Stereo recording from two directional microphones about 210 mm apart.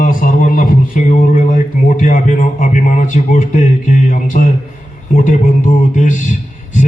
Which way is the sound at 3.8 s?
40° left (ahead or behind).